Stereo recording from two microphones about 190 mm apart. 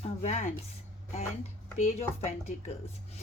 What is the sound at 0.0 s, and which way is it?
Speech, 40° left (ahead or behind).